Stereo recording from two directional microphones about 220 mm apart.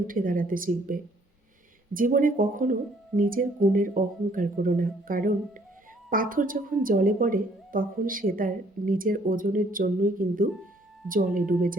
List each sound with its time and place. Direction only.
0.1 s a woman's voice: 40° right (ahead or behind)